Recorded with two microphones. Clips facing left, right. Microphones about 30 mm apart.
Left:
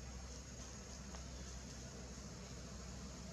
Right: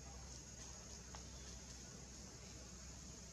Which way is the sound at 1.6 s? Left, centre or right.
Left.